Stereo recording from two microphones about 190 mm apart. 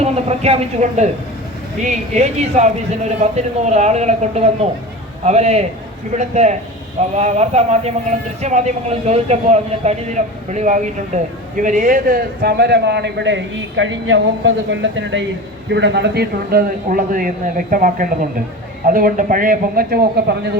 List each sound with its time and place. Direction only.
0.0 s a man's voice: 35° right (ahead or behind); by 15.2 s 75° right (ahead or behind)
15.7 s speech: 65° right (ahead or behind)